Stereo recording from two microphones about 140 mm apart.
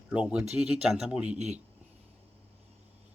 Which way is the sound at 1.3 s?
55° right (ahead or behind).